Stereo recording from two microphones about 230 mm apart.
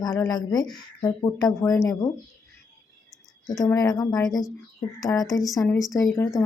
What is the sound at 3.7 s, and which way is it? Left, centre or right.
A woman's voice, centre.